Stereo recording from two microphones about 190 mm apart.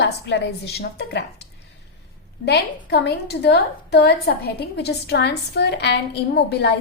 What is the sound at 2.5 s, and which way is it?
A woman's voice, 60° left (ahead or behind).